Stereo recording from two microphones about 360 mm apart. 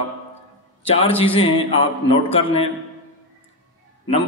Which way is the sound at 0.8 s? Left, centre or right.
Centre.